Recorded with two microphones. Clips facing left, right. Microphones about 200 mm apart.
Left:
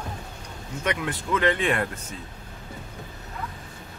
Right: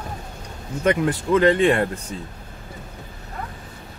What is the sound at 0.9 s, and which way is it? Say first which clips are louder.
A man's voice: right 8 dB; 35° right (ahead or behind).